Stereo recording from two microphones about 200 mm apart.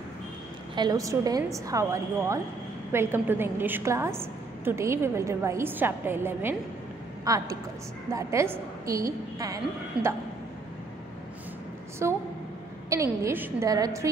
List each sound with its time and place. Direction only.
0.7 s a woman's voice: 20° right (ahead or behind)
9.9 s cough: 5° right (ahead or behind)
12.0 s a woman's voice: 15° right (ahead or behind)